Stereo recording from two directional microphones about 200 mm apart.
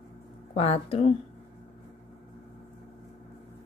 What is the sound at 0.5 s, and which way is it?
Speech, 30° left (ahead or behind).